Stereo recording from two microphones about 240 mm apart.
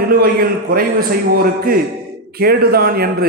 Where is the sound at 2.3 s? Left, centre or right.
Right.